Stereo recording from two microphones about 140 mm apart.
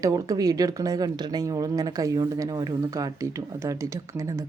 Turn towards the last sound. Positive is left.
turn(degrees=-20)  # may be behind; listen again after turning